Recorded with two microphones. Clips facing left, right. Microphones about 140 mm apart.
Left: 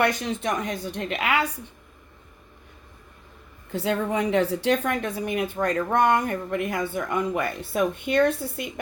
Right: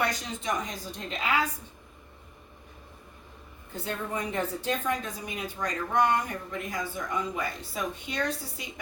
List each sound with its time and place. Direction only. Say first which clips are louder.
0.0 s a woman's voice: left 7 dB; 65° left (ahead or behind)
3.7 s a woman's voice: left 9 dB; 90° left; by 8.7 s 60° left (ahead or behind)